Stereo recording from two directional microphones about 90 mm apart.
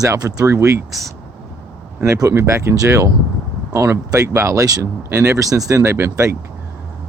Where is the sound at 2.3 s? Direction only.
30° right (ahead or behind).